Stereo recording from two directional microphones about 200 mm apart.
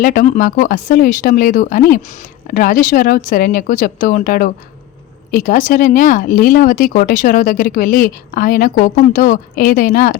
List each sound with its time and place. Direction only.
0.0 s speech: 45° left (ahead or behind)